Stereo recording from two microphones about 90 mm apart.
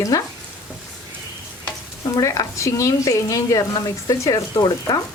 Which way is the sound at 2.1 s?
40° left (ahead or behind).